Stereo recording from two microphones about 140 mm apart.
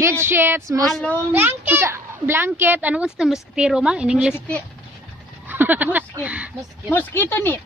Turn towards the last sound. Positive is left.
turn(degrees=15)  # may be behind; listen again after turning